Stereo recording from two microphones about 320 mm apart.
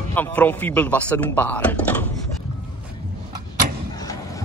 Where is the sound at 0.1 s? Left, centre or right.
Centre.